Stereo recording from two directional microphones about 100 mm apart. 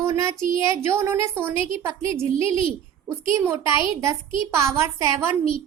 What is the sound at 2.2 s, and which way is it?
Speech, 70° left (ahead or behind).